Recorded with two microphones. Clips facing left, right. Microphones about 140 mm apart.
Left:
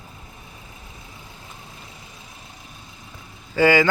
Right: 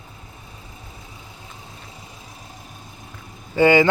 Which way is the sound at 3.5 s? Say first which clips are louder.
Right 2 dB; 25° right (ahead or behind).